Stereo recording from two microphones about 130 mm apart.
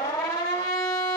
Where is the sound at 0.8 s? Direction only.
25° left (ahead or behind).